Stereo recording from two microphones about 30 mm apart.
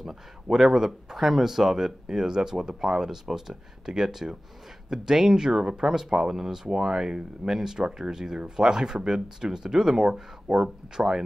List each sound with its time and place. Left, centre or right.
0.0 s speech: centre